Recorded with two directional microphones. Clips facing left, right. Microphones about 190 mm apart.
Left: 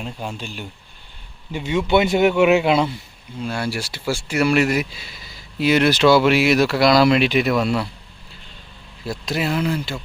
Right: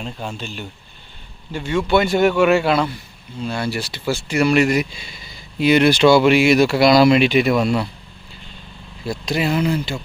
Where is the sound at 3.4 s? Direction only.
10° left (ahead or behind).